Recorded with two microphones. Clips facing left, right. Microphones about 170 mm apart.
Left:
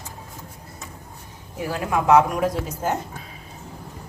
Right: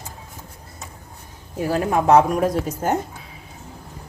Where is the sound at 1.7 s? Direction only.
40° right (ahead or behind).